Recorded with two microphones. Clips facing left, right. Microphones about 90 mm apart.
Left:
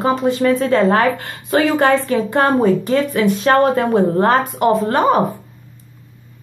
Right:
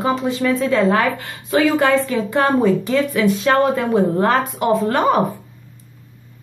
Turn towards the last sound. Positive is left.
turn(degrees=30)  # may be behind; listen again after turning